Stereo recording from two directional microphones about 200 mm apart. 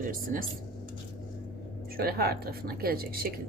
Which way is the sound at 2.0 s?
50° right (ahead or behind).